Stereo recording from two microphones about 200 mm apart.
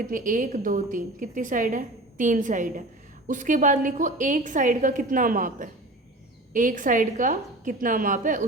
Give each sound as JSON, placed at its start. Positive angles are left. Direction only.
{"t": 0.0, "sound": "a woman's voice", "side_deg": -40}